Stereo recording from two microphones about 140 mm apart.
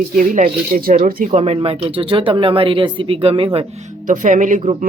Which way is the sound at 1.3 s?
50° right (ahead or behind).